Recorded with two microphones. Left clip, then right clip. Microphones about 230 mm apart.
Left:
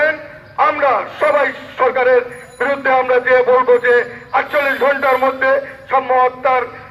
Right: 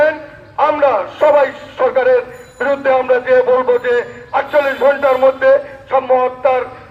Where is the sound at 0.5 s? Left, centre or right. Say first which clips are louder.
Right 1 dB; right.